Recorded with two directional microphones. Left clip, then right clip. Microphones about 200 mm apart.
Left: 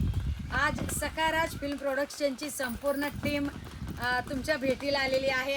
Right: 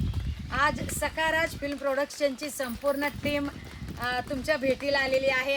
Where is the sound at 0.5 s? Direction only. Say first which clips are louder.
Right 3 dB; centre (ahead or behind).